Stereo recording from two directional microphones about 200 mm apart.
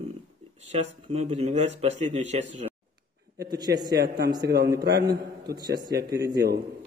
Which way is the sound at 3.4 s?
20° right (ahead or behind).